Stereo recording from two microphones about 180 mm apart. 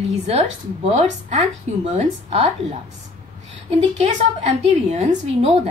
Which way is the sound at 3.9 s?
35° right (ahead or behind).